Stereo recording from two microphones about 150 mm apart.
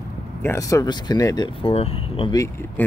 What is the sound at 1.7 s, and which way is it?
Speech, 35° left (ahead or behind).